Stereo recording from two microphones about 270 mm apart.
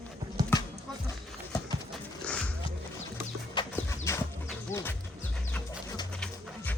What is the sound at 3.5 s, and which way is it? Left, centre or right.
Music, centre.